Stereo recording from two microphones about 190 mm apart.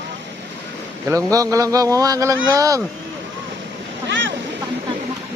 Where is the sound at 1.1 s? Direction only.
15° right (ahead or behind).